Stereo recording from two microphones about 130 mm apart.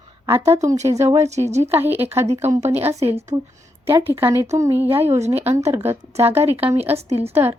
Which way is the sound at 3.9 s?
20° right (ahead or behind).